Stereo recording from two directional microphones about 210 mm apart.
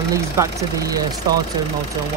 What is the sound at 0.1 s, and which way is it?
Speech, 15° right (ahead or behind).